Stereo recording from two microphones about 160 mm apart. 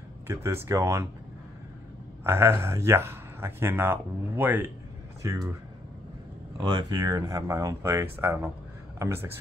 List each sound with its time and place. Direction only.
0.3 s speech: 15° right (ahead or behind)
2.2 s speech: 15° right (ahead or behind)
6.6 s speech: 25° right (ahead or behind)